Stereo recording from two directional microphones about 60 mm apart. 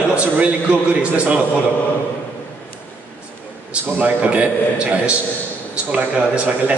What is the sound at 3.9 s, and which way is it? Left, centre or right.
Speech, right.